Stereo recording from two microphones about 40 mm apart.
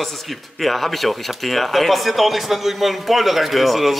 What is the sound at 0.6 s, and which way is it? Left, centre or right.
Speech, centre.